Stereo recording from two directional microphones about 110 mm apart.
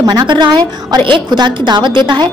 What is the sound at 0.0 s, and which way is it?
A woman's voice, 40° right (ahead or behind).